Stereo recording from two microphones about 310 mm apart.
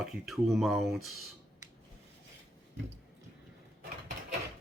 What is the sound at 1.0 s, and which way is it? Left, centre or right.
Speech, left.